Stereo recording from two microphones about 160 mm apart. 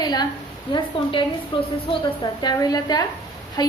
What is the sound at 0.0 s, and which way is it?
Speech, 25° left (ahead or behind).